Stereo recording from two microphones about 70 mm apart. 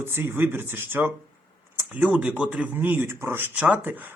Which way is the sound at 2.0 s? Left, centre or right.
Right.